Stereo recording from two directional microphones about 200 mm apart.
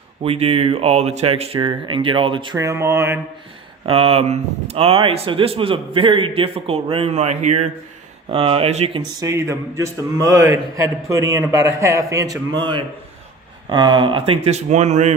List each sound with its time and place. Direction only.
0.2 s speech: 30° right (ahead or behind); by 3.2 s 10° right (ahead or behind)
3.8 s speech: 30° right (ahead or behind)